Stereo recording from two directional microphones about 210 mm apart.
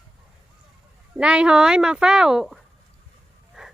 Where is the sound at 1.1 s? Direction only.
5° right (ahead or behind).